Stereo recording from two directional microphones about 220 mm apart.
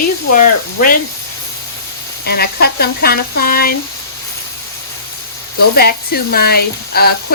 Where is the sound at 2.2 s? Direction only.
45° left (ahead or behind).